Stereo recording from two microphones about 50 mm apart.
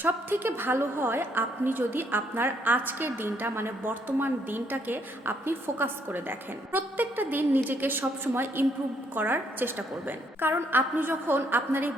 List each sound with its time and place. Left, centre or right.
0.0 s a woman's voice: right